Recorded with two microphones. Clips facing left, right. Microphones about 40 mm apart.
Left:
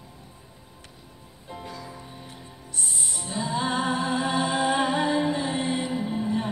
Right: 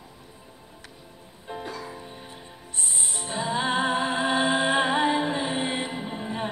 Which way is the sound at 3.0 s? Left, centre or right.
Right.